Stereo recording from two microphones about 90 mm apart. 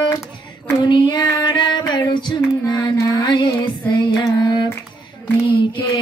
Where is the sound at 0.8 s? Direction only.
60° left (ahead or behind).